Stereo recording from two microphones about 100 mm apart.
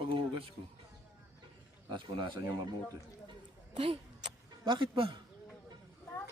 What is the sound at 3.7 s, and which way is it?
Speech, 70° right (ahead or behind).